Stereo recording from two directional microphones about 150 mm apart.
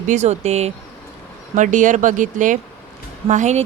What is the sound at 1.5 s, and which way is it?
Speech, 55° right (ahead or behind).